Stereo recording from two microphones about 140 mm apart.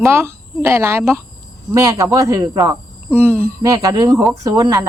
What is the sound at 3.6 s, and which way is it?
A woman's voice, 25° right (ahead or behind).